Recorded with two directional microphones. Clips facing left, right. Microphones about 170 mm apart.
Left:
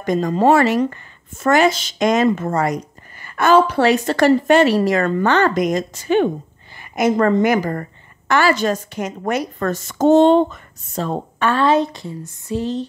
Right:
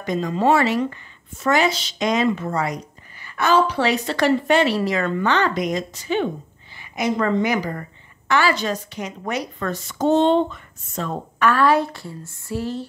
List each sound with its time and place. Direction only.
0.0 s a woman's voice: 45° left (ahead or behind); by 12.8 s 20° left (ahead or behind)